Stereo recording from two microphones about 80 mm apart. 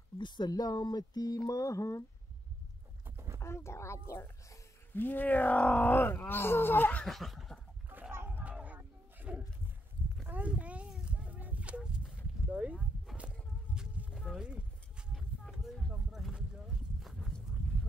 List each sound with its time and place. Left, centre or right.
0.2 s speech: left
3.3 s a child's voice: left
4.9 s speech: left
7.1 s snicker: centre
7.9 s a sound: right
12.4 s speech: centre
13.7 s a sound: centre
15.6 s a sound: centre
17.0 s horse: centre